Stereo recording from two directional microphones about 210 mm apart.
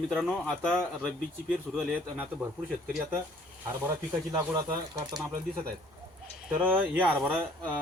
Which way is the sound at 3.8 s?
10° right (ahead or behind).